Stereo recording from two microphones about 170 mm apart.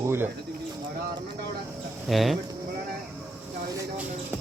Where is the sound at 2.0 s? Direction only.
Centre (ahead or behind).